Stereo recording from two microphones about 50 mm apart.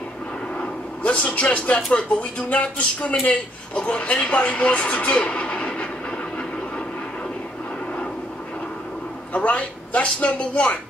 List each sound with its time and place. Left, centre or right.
0.6 s vehicle: left
1.9 s speech: left
9.3 s speech: left